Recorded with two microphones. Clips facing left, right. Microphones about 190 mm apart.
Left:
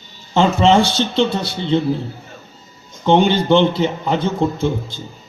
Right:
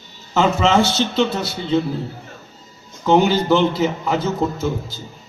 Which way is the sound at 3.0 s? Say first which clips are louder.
Left 1 dB; 30° left (ahead or behind).